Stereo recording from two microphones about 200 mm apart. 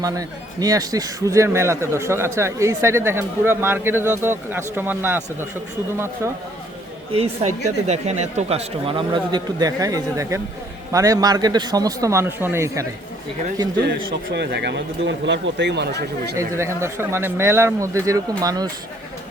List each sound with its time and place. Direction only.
0.0 s speech: 20° right (ahead or behind)
7.1 s speech: 30° right (ahead or behind); by 12.8 s 15° right (ahead or behind)
14.3 s speech: 55° right (ahead or behind)
16.4 s speech: 15° right (ahead or behind)